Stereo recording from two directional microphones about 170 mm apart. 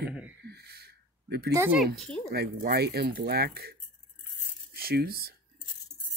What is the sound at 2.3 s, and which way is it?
Speech, 70° right (ahead or behind).